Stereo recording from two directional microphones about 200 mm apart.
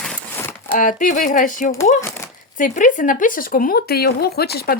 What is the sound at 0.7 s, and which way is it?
Speech, 40° left (ahead or behind).